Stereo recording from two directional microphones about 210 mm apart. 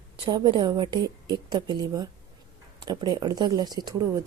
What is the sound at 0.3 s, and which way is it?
A woman's voice, 20° right (ahead or behind).